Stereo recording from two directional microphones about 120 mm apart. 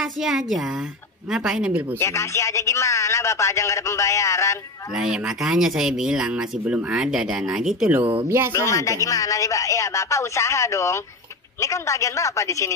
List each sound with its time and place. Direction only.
0.0 s speech: 5° right (ahead or behind)
2.0 s a man's voice: 25° left (ahead or behind)
4.9 s speech: 5° right (ahead or behind)
8.5 s a man's voice: 25° left (ahead or behind)